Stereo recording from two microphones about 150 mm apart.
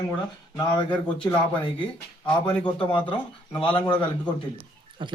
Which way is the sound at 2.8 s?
35° left (ahead or behind).